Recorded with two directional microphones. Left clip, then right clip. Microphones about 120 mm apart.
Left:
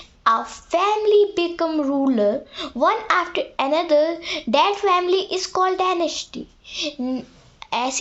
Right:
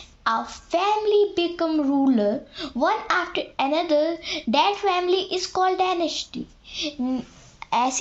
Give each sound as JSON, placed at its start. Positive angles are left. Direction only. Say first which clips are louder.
{"t": 0.3, "sound": "a child's voice", "louder": "left 5 dB", "side_deg": 30}
{"t": 7.6, "sound": "a woman's voice", "louder": "right 1 dB", "side_deg": 10}